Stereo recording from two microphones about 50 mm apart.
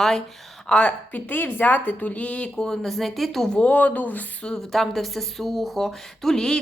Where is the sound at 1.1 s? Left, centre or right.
Left.